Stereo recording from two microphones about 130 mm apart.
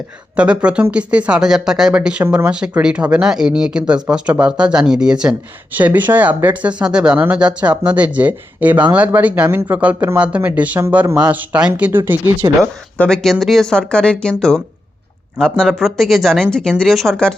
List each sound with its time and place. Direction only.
0.3 s speech: 10° right (ahead or behind)
13.0 s speech: 5° left (ahead or behind)